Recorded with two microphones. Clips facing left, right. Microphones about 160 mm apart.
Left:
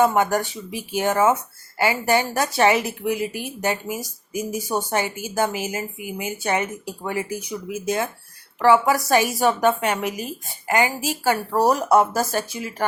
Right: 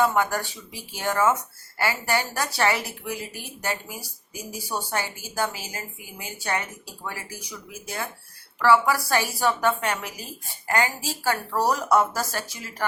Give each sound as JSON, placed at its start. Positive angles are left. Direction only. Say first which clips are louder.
{"t": 0.0, "sound": "a woman's voice", "louder": "left 4 dB", "side_deg": 15}